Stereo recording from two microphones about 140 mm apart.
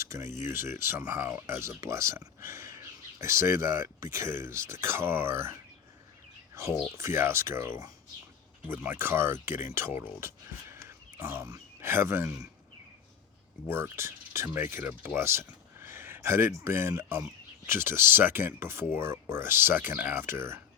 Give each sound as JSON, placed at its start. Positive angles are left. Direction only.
{"t": 0.0, "sound": "a sound", "side_deg": -20}
{"t": 0.4, "sound": "speech", "side_deg": -15}
{"t": 6.5, "sound": "bird", "side_deg": -20}
{"t": 6.9, "sound": "speech", "side_deg": -20}
{"t": 13.7, "sound": "speech", "side_deg": -15}